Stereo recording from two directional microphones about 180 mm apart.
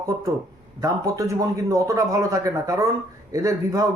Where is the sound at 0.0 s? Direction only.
20° right (ahead or behind).